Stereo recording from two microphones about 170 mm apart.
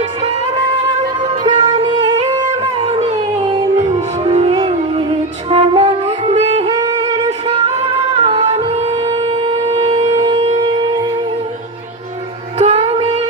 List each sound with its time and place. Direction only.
0.2 s music: 35° right (ahead or behind)
12.5 s music: 40° right (ahead or behind)